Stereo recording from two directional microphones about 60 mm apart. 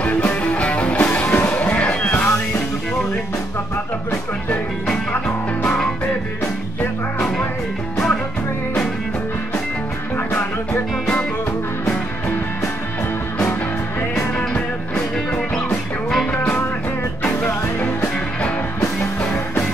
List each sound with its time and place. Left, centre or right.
0.3 s music: left
5.6 s music: centre
10.1 s music: left
14.5 s music: centre; by 18.1 s left